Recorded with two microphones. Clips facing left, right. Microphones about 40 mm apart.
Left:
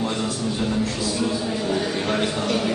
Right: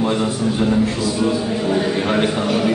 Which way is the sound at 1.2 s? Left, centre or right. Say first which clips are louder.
Right 6 dB; centre.